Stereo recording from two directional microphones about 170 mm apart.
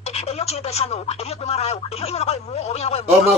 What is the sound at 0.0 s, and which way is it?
Speech, 40° left (ahead or behind).